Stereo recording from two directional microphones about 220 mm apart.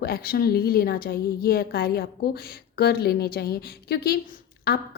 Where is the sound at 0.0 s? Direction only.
45° left (ahead or behind).